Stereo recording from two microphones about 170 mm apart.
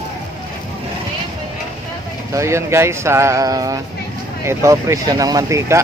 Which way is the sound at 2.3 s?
15° right (ahead or behind).